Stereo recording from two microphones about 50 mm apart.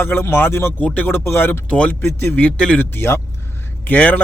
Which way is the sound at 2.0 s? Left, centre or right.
Left.